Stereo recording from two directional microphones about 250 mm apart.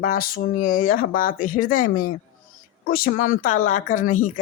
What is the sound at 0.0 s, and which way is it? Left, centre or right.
A woman's voice, left.